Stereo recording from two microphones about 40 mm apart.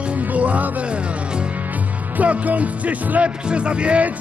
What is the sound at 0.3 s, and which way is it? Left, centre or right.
Music, right.